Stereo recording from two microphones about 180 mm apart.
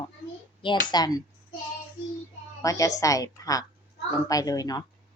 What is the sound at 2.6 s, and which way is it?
Speech, 20° left (ahead or behind).